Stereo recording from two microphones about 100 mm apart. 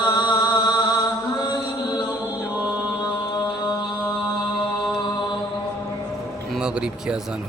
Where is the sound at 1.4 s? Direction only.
45° left (ahead or behind).